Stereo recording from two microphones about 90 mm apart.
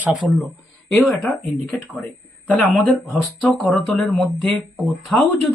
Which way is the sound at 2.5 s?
15° left (ahead or behind).